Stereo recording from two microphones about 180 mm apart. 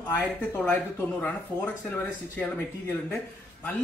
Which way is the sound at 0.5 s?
10° left (ahead or behind).